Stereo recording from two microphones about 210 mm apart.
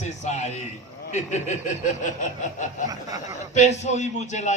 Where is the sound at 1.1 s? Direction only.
35° left (ahead or behind).